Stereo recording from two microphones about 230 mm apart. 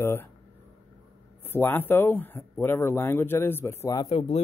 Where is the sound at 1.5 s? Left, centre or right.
Centre.